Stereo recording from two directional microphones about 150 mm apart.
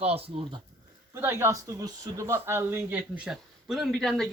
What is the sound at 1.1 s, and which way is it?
Speech, 15° right (ahead or behind).